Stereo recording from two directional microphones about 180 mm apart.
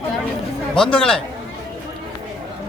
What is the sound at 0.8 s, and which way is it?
Speech, 5° left (ahead or behind).